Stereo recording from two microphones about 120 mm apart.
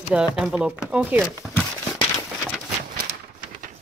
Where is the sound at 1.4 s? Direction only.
Centre (ahead or behind).